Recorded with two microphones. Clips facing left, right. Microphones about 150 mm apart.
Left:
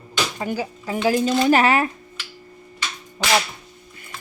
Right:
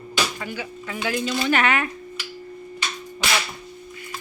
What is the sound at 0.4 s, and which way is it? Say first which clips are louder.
Speech: left 6 dB; 35° left (ahead or behind).